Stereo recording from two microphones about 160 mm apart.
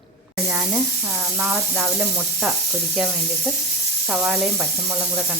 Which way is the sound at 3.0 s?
5° right (ahead or behind).